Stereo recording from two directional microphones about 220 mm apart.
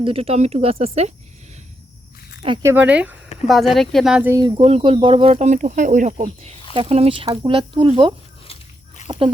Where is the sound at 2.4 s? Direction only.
20° right (ahead or behind).